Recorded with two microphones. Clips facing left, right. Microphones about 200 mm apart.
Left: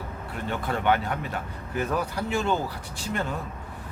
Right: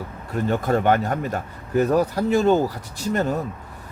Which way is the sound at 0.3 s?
40° right (ahead or behind).